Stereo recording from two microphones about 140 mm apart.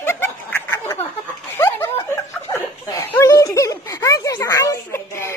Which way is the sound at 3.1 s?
20° left (ahead or behind).